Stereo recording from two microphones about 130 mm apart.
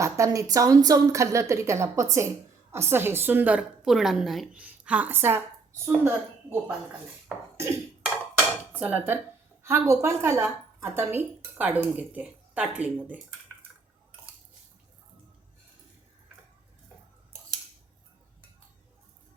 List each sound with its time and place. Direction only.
0.0 s a woman's voice: 25° right (ahead or behind)
7.5 s a sound: 20° right (ahead or behind)
8.7 s a woman's voice: 15° right (ahead or behind)